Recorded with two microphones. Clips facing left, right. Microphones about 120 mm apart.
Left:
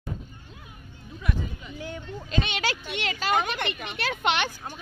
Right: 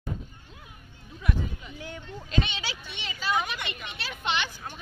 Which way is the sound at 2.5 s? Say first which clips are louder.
Left 8 dB; 70° left (ahead or behind).